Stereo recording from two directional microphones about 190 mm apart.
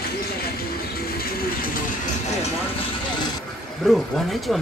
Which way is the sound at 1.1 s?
50° left (ahead or behind).